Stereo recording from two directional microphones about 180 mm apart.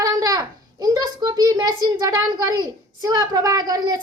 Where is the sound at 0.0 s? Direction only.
20° right (ahead or behind).